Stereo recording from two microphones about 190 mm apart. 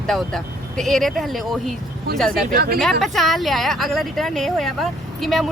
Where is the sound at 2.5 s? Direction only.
50° right (ahead or behind).